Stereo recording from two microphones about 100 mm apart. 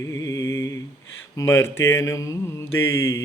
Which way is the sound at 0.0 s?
35° left (ahead or behind).